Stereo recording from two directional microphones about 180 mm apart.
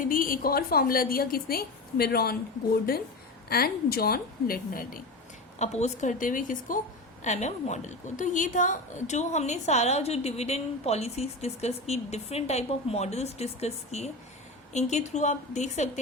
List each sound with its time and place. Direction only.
0.0 s a woman's voice: 50° left (ahead or behind)
3.5 s a woman's voice: 60° left (ahead or behind)
5.5 s a woman's voice: 40° left (ahead or behind)